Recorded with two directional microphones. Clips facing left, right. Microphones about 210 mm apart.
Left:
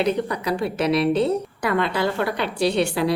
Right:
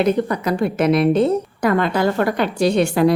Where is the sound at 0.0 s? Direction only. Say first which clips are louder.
Right 4 dB; 50° right (ahead or behind).